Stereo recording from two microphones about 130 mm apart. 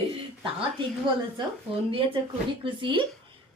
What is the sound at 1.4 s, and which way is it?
Speech, 35° right (ahead or behind).